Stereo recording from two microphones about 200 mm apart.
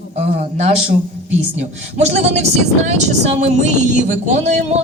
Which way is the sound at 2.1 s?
35° right (ahead or behind).